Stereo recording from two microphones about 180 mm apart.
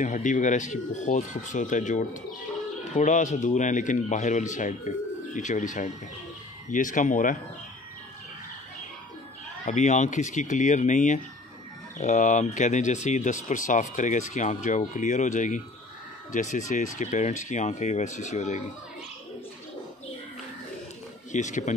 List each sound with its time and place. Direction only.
0.0 s speech: 45° left (ahead or behind)
9.7 s speech: 40° left (ahead or behind)
21.3 s speech: 40° left (ahead or behind)